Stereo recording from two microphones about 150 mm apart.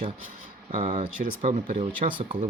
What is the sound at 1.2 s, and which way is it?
Speech, 50° right (ahead or behind).